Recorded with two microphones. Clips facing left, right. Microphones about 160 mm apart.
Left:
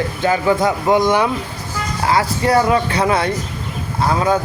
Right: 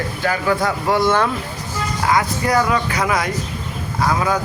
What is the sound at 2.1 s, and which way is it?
Speech, 30° left (ahead or behind).